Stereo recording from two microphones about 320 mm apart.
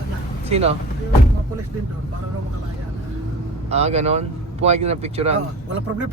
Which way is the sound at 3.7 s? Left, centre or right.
Centre.